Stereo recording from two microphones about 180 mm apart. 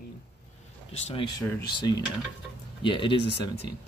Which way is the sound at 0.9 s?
30° left (ahead or behind).